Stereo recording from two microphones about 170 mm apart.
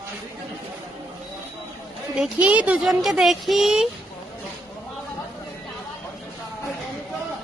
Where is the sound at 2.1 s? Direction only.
5° right (ahead or behind).